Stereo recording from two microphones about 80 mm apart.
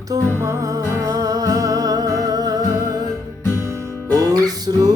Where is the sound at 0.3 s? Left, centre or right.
Right.